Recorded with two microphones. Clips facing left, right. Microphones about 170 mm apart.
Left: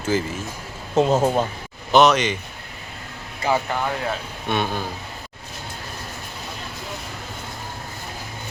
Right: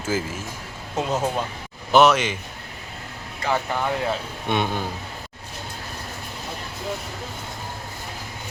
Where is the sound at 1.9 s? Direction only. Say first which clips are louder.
Left 1 dB; 5° right (ahead or behind).